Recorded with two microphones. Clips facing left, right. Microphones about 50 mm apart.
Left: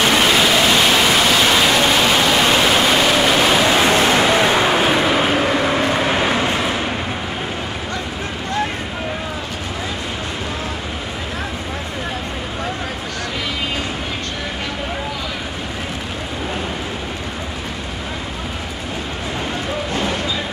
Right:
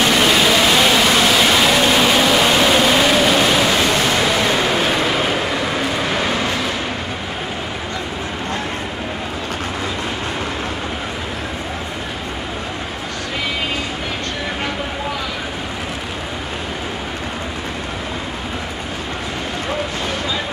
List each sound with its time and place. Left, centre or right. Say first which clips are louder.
0.0 s vehicle: even; centre
4.2 s vehicle: left 2 dB; left
5.9 s vehicle: left 2 dB; centre